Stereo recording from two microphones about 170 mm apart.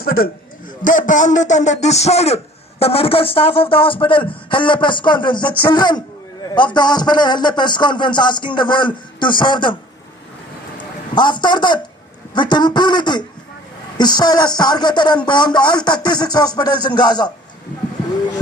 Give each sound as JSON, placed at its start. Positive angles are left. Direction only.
{"t": 0.0, "sound": "a man's voice", "side_deg": 60}
{"t": 11.1, "sound": "speech", "side_deg": 25}